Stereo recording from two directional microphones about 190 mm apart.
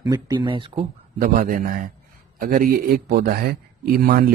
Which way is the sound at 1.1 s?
50° right (ahead or behind).